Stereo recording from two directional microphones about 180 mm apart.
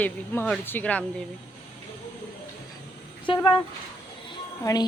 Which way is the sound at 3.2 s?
30° left (ahead or behind).